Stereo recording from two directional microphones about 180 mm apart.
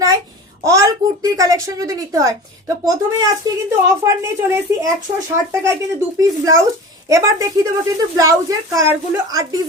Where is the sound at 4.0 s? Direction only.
15° right (ahead or behind).